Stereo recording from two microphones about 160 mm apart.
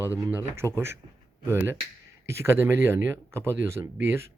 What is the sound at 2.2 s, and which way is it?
Speech, 15° right (ahead or behind).